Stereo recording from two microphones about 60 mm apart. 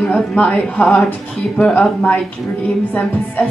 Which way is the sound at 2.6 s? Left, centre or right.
Left.